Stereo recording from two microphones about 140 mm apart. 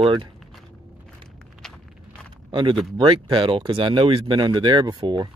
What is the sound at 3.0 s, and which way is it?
Speech, 35° right (ahead or behind).